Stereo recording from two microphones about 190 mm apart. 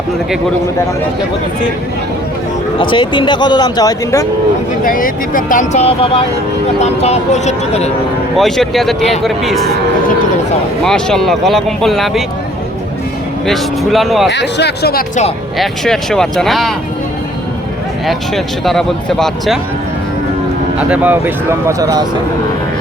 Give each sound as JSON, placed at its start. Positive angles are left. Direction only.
{"t": 2.7, "sound": "speech", "side_deg": 25}
{"t": 4.8, "sound": "speech", "side_deg": 45}
{"t": 8.4, "sound": "speech", "side_deg": 0}
{"t": 10.8, "sound": "speech", "side_deg": 5}
{"t": 13.5, "sound": "speech", "side_deg": 0}
{"t": 14.3, "sound": "speech", "side_deg": 65}
{"t": 15.5, "sound": "speech", "side_deg": 0}
{"t": 18.0, "sound": "speech", "side_deg": 0}
{"t": 20.7, "sound": "speech", "side_deg": -10}